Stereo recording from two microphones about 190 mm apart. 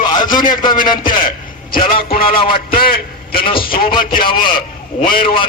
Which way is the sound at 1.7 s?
50° left (ahead or behind).